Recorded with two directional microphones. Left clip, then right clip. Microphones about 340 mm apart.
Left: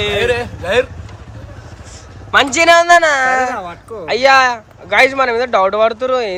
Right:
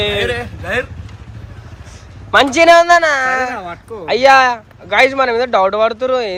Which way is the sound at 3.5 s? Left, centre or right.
Centre.